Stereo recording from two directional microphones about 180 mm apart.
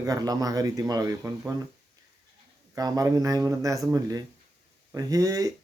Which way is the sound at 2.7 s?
20° right (ahead or behind).